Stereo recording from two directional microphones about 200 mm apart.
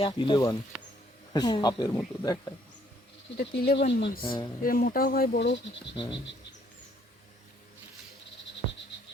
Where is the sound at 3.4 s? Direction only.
60° left (ahead or behind).